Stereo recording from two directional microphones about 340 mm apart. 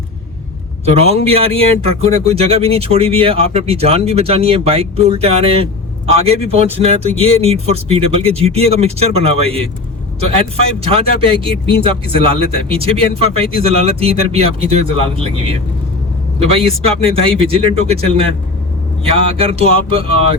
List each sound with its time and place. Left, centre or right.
0.9 s speech: centre
10.8 s speech: centre
16.4 s speech: centre